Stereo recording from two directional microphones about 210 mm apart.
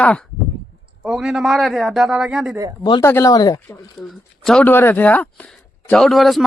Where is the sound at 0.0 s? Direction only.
5° left (ahead or behind).